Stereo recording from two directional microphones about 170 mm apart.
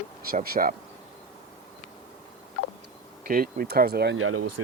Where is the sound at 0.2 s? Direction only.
60° right (ahead or behind).